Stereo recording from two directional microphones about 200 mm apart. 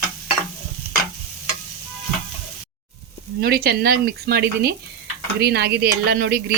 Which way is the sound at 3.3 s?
50° right (ahead or behind).